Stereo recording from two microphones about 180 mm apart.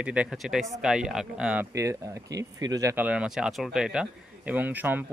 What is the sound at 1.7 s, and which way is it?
Speech, 15° right (ahead or behind).